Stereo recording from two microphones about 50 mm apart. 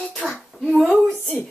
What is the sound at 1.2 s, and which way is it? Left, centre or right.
Speech, left.